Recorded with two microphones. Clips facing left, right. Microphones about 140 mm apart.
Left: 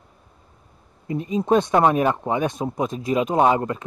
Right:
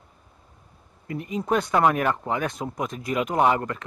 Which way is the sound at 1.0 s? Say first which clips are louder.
Left 5 dB; 20° left (ahead or behind).